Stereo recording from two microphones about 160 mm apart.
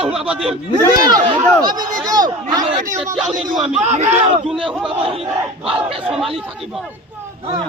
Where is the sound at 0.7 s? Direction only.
25° right (ahead or behind).